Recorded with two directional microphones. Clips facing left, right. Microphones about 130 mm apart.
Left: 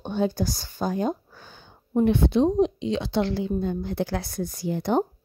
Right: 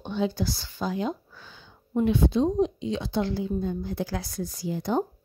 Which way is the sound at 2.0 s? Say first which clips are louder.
Left 3 dB; 60° left (ahead or behind).